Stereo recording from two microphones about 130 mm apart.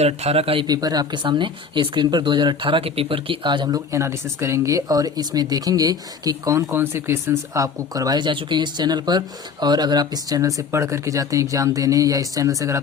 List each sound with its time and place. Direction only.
0.0 s speech: 55° right (ahead or behind)
0.7 s speech: 30° right (ahead or behind)
3.9 s speech: 20° right (ahead or behind)